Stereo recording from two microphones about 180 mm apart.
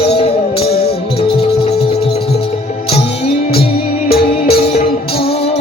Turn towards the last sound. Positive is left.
turn(degrees=60)  # may be behind; listen again after turning